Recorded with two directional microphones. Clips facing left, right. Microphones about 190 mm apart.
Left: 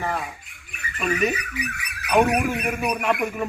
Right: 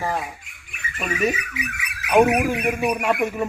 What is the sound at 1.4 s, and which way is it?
Speech, 35° left (ahead or behind).